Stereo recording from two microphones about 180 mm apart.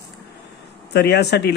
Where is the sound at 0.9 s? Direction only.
65° left (ahead or behind).